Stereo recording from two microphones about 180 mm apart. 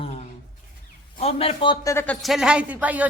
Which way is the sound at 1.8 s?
15° left (ahead or behind).